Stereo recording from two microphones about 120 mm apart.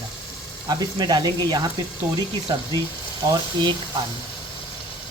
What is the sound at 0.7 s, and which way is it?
Speech, 35° right (ahead or behind).